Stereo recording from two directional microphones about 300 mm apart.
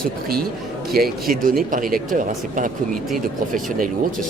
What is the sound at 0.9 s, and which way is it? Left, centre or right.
Speech, right.